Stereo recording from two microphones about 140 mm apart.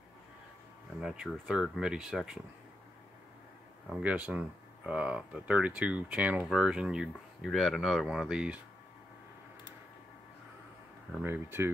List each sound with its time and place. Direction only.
1.0 s speech: centre (ahead or behind)
4.0 s speech: 10° right (ahead or behind)
11.2 s speech: 15° right (ahead or behind)